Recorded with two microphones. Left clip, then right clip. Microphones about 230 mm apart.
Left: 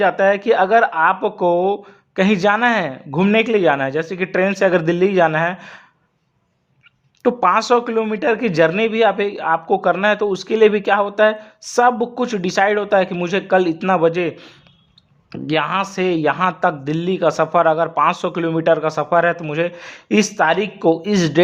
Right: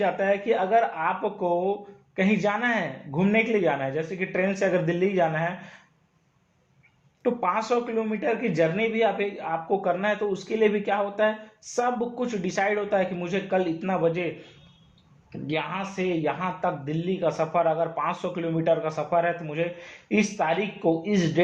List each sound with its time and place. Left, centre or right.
0.0 s speech: left
7.2 s speech: left
15.3 s speech: left